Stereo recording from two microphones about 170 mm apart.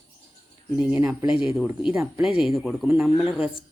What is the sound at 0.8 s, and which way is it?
Speech, 5° right (ahead or behind).